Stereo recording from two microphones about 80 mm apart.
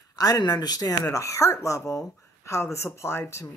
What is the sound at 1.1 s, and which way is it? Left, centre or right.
Speech, left.